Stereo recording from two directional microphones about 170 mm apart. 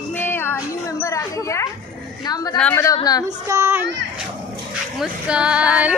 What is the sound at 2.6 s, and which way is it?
Speech, 10° left (ahead or behind).